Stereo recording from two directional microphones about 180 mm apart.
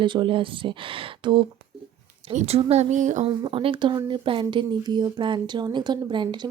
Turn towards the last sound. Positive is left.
turn(degrees=-25)  # may be behind; listen again after turning